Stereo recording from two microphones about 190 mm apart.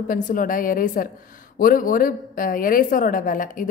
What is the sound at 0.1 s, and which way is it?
A woman's voice, 45° left (ahead or behind).